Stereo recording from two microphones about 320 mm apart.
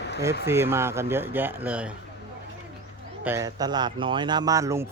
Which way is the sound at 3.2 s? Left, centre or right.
Centre.